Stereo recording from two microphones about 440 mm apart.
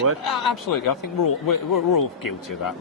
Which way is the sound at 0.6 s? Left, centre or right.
Left.